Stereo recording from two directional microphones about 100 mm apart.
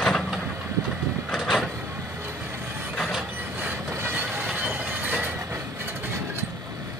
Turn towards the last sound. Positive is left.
turn(degrees=-20)  # may be behind; listen again after turning